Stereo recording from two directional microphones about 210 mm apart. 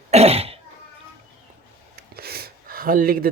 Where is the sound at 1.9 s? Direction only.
45° right (ahead or behind).